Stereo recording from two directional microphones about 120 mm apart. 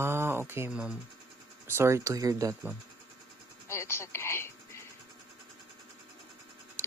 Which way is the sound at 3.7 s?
20° left (ahead or behind).